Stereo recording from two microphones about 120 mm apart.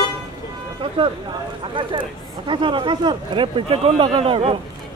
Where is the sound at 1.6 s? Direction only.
45° right (ahead or behind).